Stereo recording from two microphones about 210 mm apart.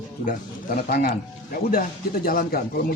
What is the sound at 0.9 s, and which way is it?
Speech, 45° left (ahead or behind).